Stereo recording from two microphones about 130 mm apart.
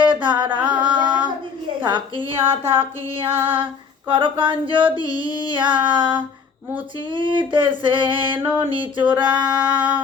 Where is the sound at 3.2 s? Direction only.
15° right (ahead or behind).